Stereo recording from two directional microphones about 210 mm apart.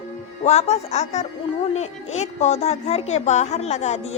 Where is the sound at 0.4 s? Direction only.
30° left (ahead or behind).